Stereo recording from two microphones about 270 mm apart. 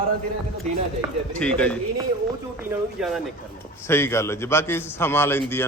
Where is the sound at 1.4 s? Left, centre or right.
Centre.